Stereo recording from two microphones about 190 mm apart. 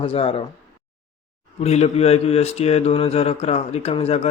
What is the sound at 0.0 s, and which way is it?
Speech, 30° left (ahead or behind).